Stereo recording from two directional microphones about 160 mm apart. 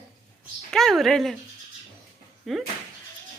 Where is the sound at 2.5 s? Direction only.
Centre (ahead or behind).